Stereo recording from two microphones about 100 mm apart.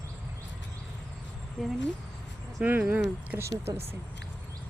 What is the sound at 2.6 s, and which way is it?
Speech, 15° right (ahead or behind).